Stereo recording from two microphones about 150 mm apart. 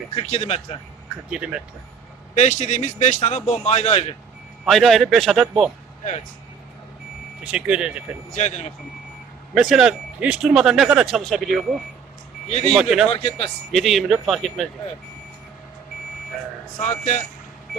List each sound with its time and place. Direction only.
0.1 s a man's voice: 40° left (ahead or behind)
1.3 s speech: 5° right (ahead or behind)
2.3 s a man's voice: 50° left (ahead or behind)
4.6 s speech: centre (ahead or behind)
7.4 s speech: 5° right (ahead or behind)
8.4 s a man's voice: 50° left (ahead or behind)
9.6 s speech: 5° right (ahead or behind)
12.5 s a man's voice: 45° left (ahead or behind)
12.7 s speech: centre (ahead or behind)
13.1 s speech: 40° left (ahead or behind)
13.7 s speech: centre (ahead or behind)
17.0 s a man's voice: 50° left (ahead or behind)